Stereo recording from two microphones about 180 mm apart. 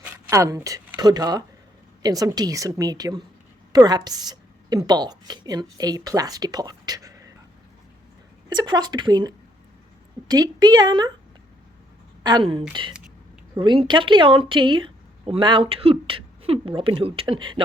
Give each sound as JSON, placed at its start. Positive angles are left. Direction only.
{"t": 0.0, "sound": "a woman's voice", "side_deg": -15}
{"t": 8.4, "sound": "a woman's voice", "side_deg": -25}
{"t": 12.2, "sound": "a woman's voice", "side_deg": -25}